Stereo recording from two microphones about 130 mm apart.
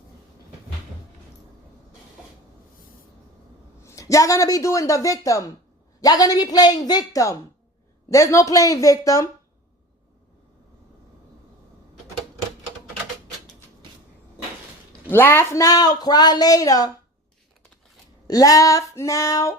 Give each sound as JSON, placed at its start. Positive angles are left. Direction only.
{"t": 3.8, "sound": "a woman's voice", "side_deg": 25}
{"t": 15.1, "sound": "speech", "side_deg": 15}
{"t": 18.3, "sound": "speech", "side_deg": 30}